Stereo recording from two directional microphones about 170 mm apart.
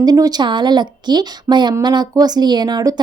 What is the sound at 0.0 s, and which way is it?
A woman's voice, 25° right (ahead or behind).